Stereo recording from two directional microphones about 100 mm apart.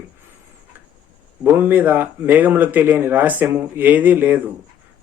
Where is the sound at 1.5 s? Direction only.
20° right (ahead or behind).